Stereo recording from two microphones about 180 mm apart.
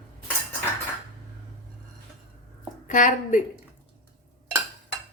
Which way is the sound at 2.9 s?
45° left (ahead or behind).